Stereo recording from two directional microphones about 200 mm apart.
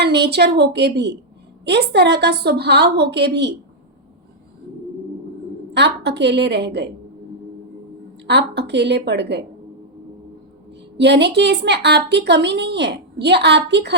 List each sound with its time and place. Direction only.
0.0 s a woman's voice: 55° right (ahead or behind)
5.7 s a woman's voice: 60° right (ahead or behind)
8.3 s a woman's voice: 60° right (ahead or behind)
10.9 s a woman's voice: 60° right (ahead or behind)